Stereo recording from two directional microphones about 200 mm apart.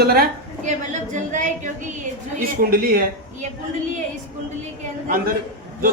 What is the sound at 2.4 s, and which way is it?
Speech, 45° right (ahead or behind).